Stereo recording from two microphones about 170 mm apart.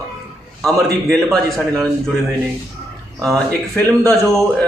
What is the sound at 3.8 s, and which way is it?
Speech, 20° right (ahead or behind).